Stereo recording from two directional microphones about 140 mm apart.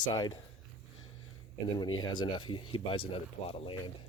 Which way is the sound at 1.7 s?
35° left (ahead or behind).